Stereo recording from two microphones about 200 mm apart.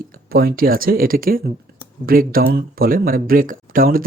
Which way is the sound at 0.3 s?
50° right (ahead or behind).